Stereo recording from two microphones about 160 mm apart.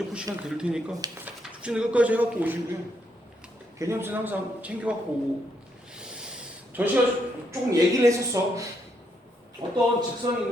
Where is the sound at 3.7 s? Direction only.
15° right (ahead or behind).